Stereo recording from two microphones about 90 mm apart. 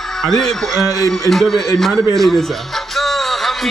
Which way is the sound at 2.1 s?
Centre (ahead or behind).